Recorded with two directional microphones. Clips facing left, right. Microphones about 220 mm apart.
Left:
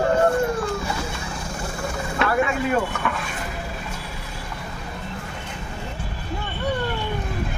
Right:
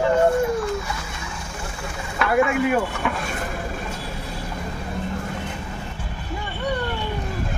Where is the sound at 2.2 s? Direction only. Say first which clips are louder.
Even; 25° left (ahead or behind).